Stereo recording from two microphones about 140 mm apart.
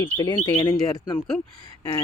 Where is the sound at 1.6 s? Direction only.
25° left (ahead or behind).